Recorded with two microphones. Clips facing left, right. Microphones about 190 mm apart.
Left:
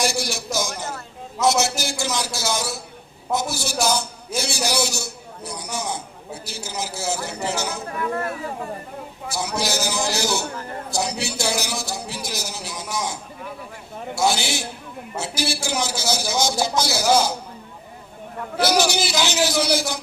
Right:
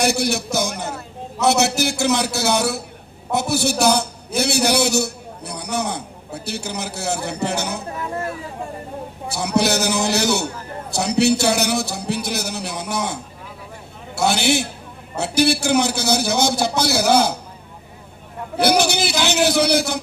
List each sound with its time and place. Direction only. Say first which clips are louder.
0.0 s a man's voice: right 5 dB; 60° right (ahead or behind)
7.9 s speech: left 1 dB; 25° right (ahead or behind)
9.3 s a man's voice: right 6 dB; 65° right (ahead or behind)
14.2 s a man's voice: right 4 dB; 60° right (ahead or behind)
18.6 s a man's voice: right 3 dB; 60° right (ahead or behind)